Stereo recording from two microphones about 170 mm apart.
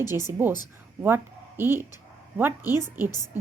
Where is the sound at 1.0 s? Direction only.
15° right (ahead or behind).